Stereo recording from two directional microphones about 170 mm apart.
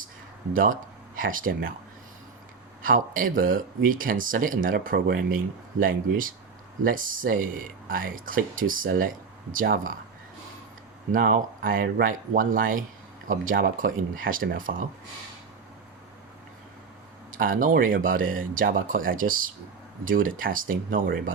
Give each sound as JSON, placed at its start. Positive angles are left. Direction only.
{"t": 0.5, "sound": "speech", "side_deg": -55}
{"t": 2.8, "sound": "speech", "side_deg": -55}
{"t": 11.1, "sound": "speech", "side_deg": -55}
{"t": 17.3, "sound": "speech", "side_deg": -55}